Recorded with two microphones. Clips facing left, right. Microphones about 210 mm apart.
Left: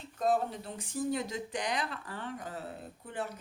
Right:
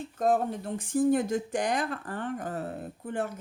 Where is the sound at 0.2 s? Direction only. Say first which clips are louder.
Right 4 dB; 50° right (ahead or behind).